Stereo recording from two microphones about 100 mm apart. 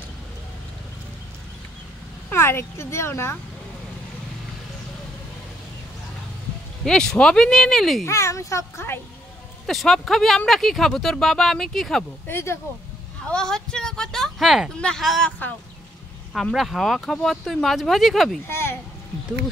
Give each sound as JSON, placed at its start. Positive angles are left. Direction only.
{"t": 2.3, "sound": "speech", "side_deg": 25}
{"t": 6.8, "sound": "speech", "side_deg": 5}
{"t": 8.0, "sound": "speech", "side_deg": 30}
{"t": 9.7, "sound": "speech", "side_deg": 0}
{"t": 12.3, "sound": "speech", "side_deg": 25}
{"t": 13.3, "sound": "speech", "side_deg": 10}
{"t": 16.5, "sound": "speech", "side_deg": 0}
{"t": 18.5, "sound": "speech", "side_deg": 25}